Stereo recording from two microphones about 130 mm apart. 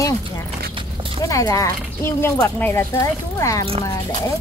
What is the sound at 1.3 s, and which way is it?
Speech, 25° left (ahead or behind).